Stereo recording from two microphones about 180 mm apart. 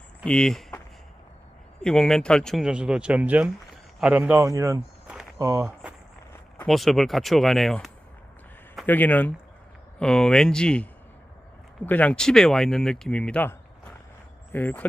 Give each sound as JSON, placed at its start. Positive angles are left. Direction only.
{"t": 0.3, "sound": "speech", "side_deg": 5}
{"t": 1.8, "sound": "speech", "side_deg": 5}
{"t": 6.6, "sound": "speech", "side_deg": 0}
{"t": 8.9, "sound": "speech", "side_deg": 10}
{"t": 11.9, "sound": "speech", "side_deg": 10}